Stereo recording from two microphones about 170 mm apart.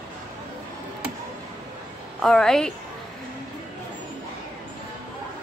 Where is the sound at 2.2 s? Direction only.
5° left (ahead or behind).